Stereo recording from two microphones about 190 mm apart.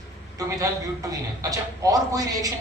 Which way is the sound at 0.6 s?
20° right (ahead or behind).